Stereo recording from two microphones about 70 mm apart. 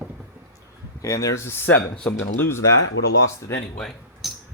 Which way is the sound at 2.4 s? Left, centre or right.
Left.